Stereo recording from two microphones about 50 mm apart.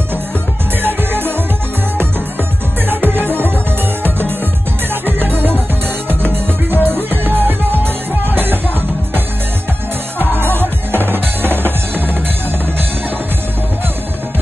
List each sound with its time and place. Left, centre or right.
0.8 s music: right
5.0 s music: right
10.3 s music: right